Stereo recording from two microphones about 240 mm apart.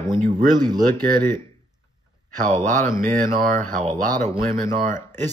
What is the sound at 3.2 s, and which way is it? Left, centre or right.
Speech, right.